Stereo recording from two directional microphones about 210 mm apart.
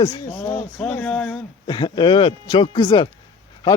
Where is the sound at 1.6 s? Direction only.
20° left (ahead or behind).